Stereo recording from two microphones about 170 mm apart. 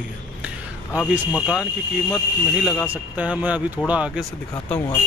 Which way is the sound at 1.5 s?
5° right (ahead or behind).